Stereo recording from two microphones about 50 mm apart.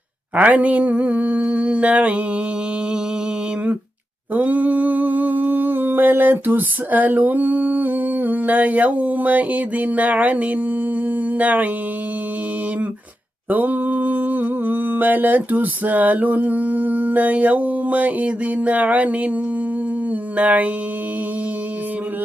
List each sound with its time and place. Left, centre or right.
0.3 s mantra: right
4.4 s humming: right
13.5 s mantra: right
20.3 s mantra: right